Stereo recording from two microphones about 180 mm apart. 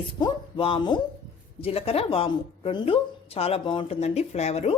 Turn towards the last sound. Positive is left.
turn(degrees=35)  # may be behind; listen again after turning